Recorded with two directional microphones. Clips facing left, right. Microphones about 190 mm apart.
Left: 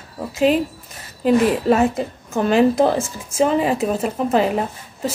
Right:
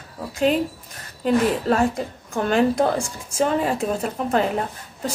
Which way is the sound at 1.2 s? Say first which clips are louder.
Left 4 dB; 5° left (ahead or behind).